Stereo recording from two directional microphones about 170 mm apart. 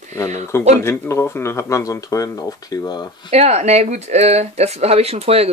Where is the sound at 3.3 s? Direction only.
40° right (ahead or behind).